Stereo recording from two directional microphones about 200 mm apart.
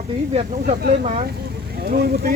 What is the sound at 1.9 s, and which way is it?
Speech, 50° right (ahead or behind).